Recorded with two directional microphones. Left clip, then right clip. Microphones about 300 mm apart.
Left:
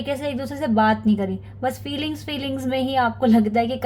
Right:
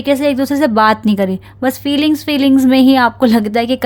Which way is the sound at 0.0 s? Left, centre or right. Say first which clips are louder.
Right 12 dB; right.